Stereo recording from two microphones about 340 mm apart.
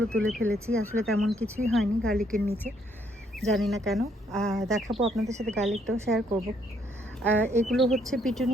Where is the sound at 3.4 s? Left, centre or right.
Centre.